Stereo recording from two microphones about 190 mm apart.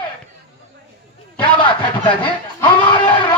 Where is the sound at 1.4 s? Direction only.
25° left (ahead or behind).